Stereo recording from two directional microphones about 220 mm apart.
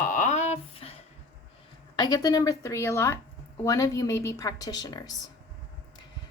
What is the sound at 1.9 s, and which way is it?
A woman's voice, 15° left (ahead or behind).